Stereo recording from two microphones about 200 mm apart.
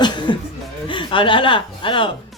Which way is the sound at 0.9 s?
25° left (ahead or behind).